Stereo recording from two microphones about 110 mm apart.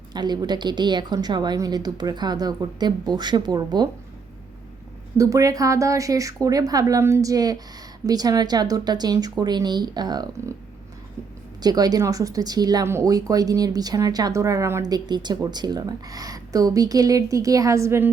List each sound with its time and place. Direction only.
0.1 s a woman's voice: 40° right (ahead or behind)
5.1 s a woman's voice: 30° right (ahead or behind)
11.6 s a woman's voice: 35° right (ahead or behind)
12.8 s a woman's voice: 25° right (ahead or behind)